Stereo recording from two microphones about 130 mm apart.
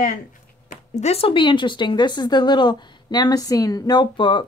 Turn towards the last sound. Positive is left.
turn(degrees=35)  # may be behind; listen again after turning